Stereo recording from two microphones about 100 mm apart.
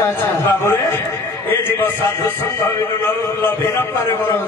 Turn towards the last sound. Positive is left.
turn(degrees=20)  # may be behind; listen again after turning